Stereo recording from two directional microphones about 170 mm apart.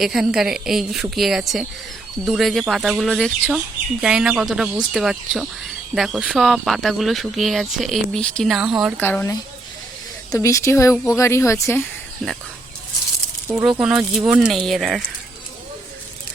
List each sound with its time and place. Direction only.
0.0 s speech: centre (ahead or behind)
9.0 s speech: 10° left (ahead or behind)
13.5 s speech: 5° right (ahead or behind)